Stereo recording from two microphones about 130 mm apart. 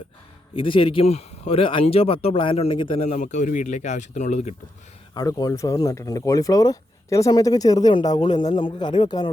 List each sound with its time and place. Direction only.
0.5 s speech: 40° left (ahead or behind)
3.1 s speech: 70° left (ahead or behind)
5.1 s a man's voice: 30° left (ahead or behind)